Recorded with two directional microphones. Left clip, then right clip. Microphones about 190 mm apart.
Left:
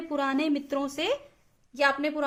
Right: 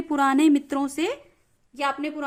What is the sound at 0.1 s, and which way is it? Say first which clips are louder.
A woman's voice: right 8 dB; 50° right (ahead or behind).